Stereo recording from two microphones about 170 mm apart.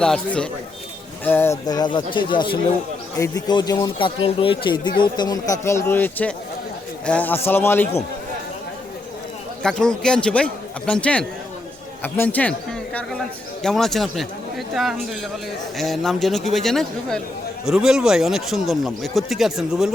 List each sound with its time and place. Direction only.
0.0 s speech: 5° left (ahead or behind)
1.6 s speech: 25° left (ahead or behind)
9.6 s speech: 5° left (ahead or behind)
15.8 s speech: centre (ahead or behind)